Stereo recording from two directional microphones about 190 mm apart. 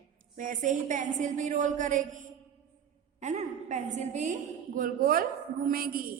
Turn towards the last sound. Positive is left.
turn(degrees=-50)  # may be behind; listen again after turning